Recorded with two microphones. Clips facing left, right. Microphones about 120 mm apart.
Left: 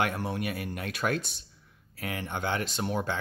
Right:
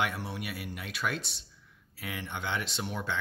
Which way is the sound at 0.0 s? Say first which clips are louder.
Left 4 dB; 50° left (ahead or behind).